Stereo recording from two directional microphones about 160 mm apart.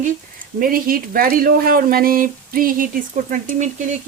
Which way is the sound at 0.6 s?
65° right (ahead or behind).